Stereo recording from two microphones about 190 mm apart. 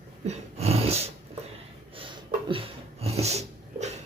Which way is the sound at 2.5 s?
30° right (ahead or behind).